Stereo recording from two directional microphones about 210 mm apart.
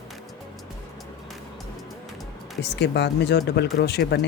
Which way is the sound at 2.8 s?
55° left (ahead or behind).